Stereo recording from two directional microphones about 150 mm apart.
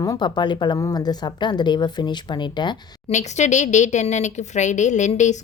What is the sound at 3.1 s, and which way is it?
Speech, 50° left (ahead or behind).